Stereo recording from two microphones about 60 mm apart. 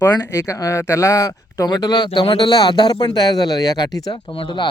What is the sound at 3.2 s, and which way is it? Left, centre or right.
Speech, left.